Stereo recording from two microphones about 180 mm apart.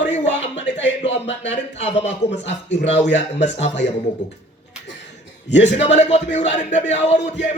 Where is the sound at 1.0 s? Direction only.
35° left (ahead or behind).